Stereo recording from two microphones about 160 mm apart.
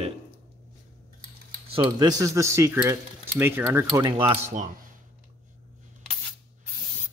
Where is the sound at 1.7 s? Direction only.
30° right (ahead or behind).